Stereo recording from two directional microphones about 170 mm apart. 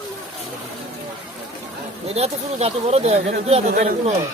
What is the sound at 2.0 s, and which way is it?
Speech, 40° right (ahead or behind).